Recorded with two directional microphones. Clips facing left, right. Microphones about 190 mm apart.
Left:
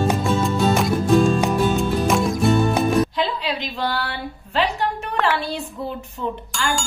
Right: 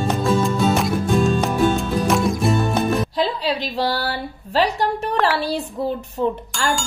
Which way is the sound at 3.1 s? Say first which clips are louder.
Right 3 dB; 35° right (ahead or behind).